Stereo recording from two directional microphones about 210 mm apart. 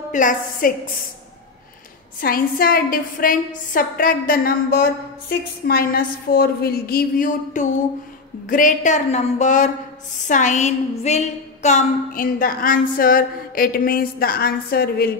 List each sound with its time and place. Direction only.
0.1 s a woman's voice: 40° left (ahead or behind)
2.1 s a woman's voice: 45° left (ahead or behind)